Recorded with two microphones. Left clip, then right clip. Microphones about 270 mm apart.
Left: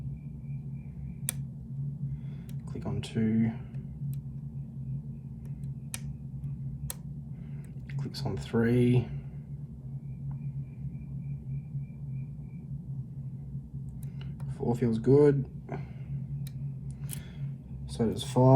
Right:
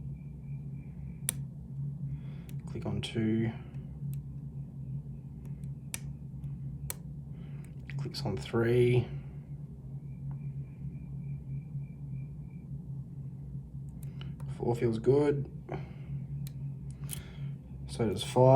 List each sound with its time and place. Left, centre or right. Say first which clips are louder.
2.7 s speech: even; right
7.9 s speech: even; right
14.6 s speech: even; right
17.9 s speech: even; right